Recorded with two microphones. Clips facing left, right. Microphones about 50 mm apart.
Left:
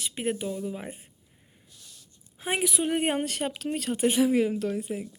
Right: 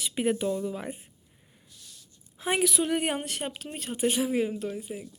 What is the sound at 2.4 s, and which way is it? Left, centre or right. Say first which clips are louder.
Speech: right 1 dB; left.